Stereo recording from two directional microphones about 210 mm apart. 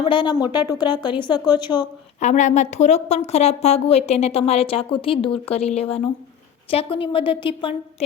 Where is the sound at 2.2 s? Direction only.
35° left (ahead or behind).